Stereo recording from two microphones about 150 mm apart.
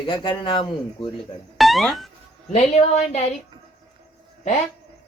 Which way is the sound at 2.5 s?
50° left (ahead or behind).